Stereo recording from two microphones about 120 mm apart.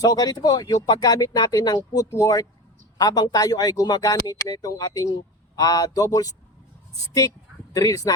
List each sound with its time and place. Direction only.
0.0 s speech: 30° left (ahead or behind)
7.7 s speech: 30° left (ahead or behind)